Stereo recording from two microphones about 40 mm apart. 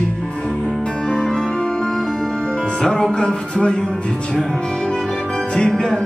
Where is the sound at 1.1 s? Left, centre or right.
Centre.